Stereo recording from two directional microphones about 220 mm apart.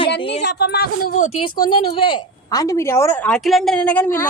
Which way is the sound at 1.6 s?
20° left (ahead or behind).